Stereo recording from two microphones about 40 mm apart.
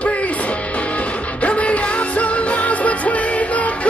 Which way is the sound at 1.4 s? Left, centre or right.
Left.